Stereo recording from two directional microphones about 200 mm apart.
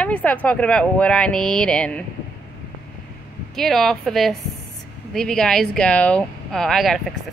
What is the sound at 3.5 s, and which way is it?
A woman's voice, centre (ahead or behind).